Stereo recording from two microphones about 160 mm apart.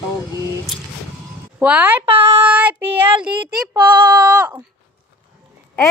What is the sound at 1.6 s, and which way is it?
Speech, 10° right (ahead or behind).